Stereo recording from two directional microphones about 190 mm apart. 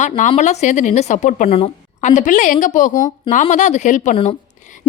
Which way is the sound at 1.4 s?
30° left (ahead or behind).